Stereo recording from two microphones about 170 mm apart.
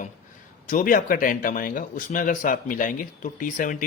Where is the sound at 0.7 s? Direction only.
55° left (ahead or behind).